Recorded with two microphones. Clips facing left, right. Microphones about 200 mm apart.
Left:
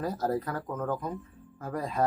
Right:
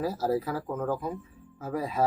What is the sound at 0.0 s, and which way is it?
Speech, 5° right (ahead or behind).